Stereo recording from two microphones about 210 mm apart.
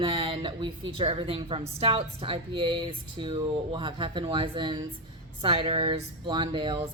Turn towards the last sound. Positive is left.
turn(degrees=-20)  # may be behind; listen again after turning